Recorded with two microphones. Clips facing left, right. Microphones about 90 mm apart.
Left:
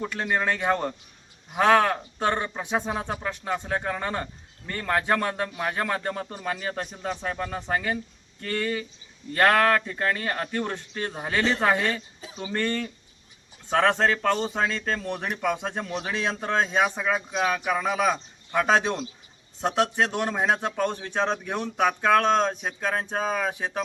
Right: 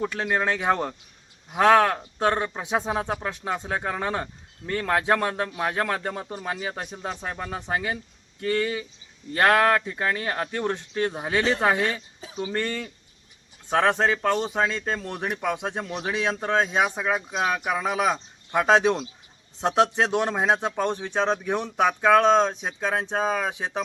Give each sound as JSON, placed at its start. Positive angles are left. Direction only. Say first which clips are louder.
{"t": 0.0, "sound": "speech", "louder": "right 1 dB", "side_deg": -5}